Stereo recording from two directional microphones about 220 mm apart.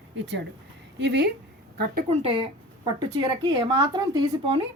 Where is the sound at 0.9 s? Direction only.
50° right (ahead or behind).